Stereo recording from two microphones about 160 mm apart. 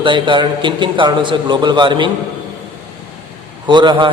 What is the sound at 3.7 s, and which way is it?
Speech, 30° right (ahead or behind).